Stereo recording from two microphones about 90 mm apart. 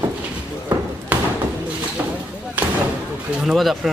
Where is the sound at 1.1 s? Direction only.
15° right (ahead or behind).